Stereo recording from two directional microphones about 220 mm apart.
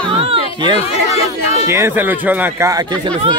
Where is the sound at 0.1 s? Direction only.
25° right (ahead or behind).